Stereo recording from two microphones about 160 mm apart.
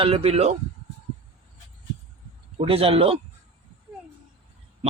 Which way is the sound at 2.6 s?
35° right (ahead or behind).